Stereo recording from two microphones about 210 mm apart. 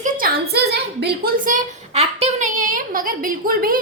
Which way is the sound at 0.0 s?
45° right (ahead or behind).